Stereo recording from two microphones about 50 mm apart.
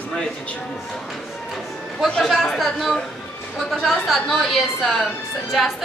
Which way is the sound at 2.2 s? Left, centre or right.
Centre.